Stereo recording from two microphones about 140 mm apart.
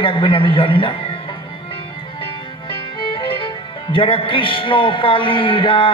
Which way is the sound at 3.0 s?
40° left (ahead or behind).